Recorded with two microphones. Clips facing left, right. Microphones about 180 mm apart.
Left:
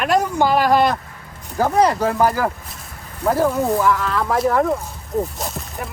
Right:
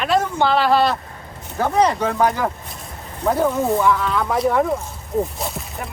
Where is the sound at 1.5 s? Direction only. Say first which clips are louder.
Left 1 dB; 5° left (ahead or behind).